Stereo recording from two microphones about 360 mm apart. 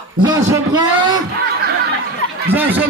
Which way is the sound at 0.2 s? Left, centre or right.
Centre.